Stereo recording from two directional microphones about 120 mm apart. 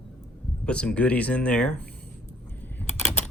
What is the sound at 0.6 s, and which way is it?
Speech, 10° left (ahead or behind).